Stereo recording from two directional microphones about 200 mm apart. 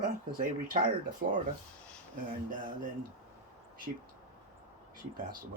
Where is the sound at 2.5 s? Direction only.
40° right (ahead or behind).